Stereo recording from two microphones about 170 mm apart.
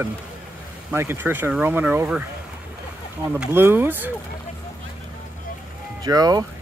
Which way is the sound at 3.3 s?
15° right (ahead or behind).